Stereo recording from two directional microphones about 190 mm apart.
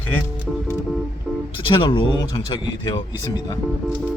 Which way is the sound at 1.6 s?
25° left (ahead or behind).